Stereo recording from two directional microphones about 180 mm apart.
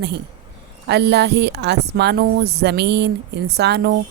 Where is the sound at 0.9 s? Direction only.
70° right (ahead or behind).